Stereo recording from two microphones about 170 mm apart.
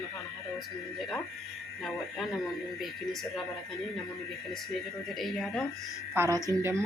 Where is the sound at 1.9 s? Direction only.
Centre (ahead or behind).